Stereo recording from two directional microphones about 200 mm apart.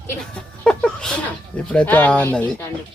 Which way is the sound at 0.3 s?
5° left (ahead or behind).